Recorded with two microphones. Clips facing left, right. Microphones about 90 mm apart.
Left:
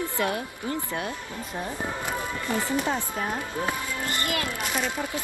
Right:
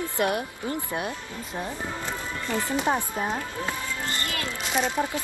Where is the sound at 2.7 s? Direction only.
20° right (ahead or behind).